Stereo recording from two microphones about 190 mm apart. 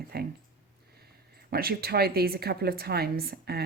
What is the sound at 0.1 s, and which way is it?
Speech, 55° right (ahead or behind).